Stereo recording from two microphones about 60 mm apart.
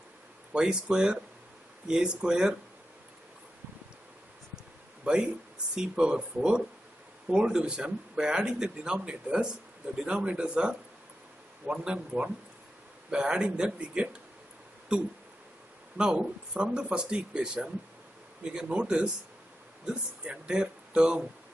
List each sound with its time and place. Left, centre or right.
0.5 s speech: centre
5.0 s a man's voice: centre
16.0 s speech: centre